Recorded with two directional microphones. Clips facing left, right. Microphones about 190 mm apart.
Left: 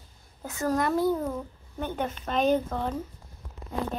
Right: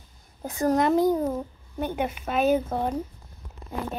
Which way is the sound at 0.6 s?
20° right (ahead or behind).